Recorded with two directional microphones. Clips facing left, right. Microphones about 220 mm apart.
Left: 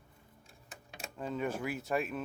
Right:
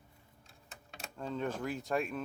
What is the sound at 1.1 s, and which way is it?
Speech, 5° left (ahead or behind).